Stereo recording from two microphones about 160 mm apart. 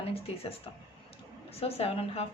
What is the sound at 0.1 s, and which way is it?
A woman's voice, 35° left (ahead or behind).